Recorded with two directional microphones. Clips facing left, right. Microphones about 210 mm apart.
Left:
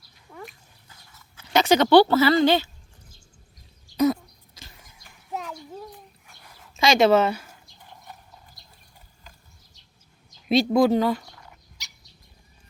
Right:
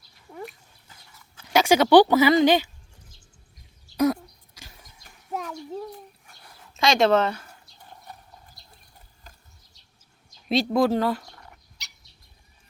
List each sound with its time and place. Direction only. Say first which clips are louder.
0.3 s dog: right 3 dB; 25° right (ahead or behind)
1.5 s a woman's voice: even; 10° right (ahead or behind)
3.9 s a sound: left 1 dB; 10° right (ahead or behind)
6.7 s speech: left 2 dB; centre (ahead or behind)
10.5 s speech: left 3 dB; centre (ahead or behind)
11.8 s bird: left 1 dB; 60° right (ahead or behind)